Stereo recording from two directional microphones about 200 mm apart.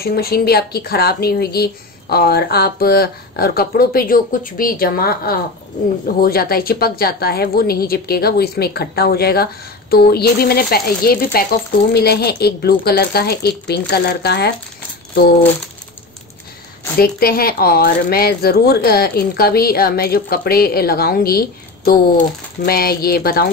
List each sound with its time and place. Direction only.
0.0 s a woman's voice: 50° left (ahead or behind)
17.0 s a woman's voice: 50° left (ahead or behind)